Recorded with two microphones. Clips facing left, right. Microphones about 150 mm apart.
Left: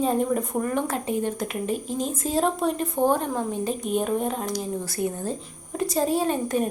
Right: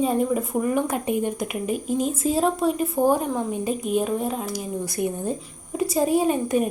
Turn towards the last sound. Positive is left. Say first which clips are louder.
# right 3 dB
turn(degrees=-10)  # may be behind; listen again after turning